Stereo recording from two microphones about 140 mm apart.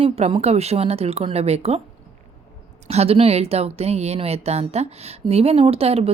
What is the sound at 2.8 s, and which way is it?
A woman's voice, 50° right (ahead or behind).